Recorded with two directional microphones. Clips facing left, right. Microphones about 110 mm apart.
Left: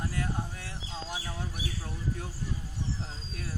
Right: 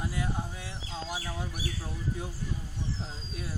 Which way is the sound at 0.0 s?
10° right (ahead or behind).